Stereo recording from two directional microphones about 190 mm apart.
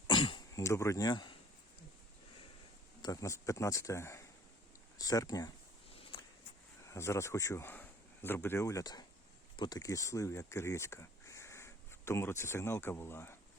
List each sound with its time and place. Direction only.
0.1 s cough: 25° left (ahead or behind)
3.0 s speech: 20° left (ahead or behind)
5.9 s a sound: 30° left (ahead or behind)
6.8 s speech: 15° left (ahead or behind)